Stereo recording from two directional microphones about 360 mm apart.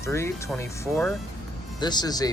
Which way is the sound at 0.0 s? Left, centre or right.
Centre.